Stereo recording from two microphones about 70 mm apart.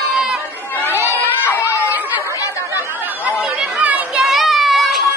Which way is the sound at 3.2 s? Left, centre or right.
Centre.